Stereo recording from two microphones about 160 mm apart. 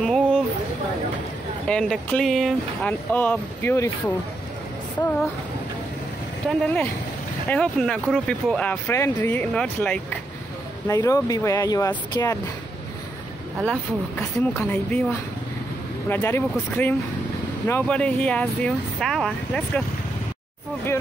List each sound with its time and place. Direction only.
0.0 s a sound: 5° left (ahead or behind)
1.7 s speech: 5° left (ahead or behind)
7.4 s speech: 5° left (ahead or behind)
10.9 s speech: 20° left (ahead or behind)
13.7 s speech: 10° left (ahead or behind)
16.1 s speech: 15° left (ahead or behind)